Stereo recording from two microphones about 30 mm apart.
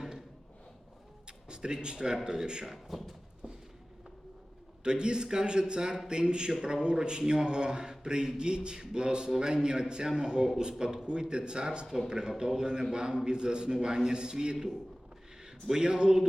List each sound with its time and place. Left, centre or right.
1.5 s a man's voice: right
2.6 s speech: centre
3.4 s a sound: right
4.8 s a man's voice: right
10.2 s a man's voice: centre
10.6 s a man's voice: right
15.7 s a man's voice: right